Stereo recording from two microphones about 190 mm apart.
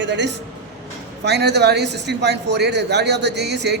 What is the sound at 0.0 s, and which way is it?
A man's voice, 65° right (ahead or behind).